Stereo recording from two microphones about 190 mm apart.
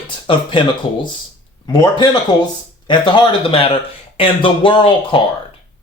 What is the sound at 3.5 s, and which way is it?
Speech, 30° left (ahead or behind).